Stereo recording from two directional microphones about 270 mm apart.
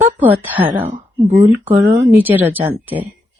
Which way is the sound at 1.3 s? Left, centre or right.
Right.